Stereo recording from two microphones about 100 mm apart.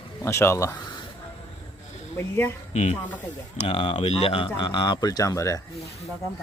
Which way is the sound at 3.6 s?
65° left (ahead or behind).